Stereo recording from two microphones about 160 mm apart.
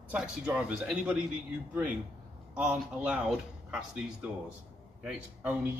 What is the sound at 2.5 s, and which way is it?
Speech, 5° right (ahead or behind).